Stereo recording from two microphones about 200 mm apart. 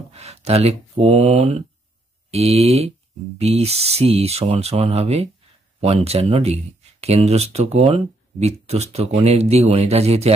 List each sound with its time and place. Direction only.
0.1 s speech: 30° right (ahead or behind)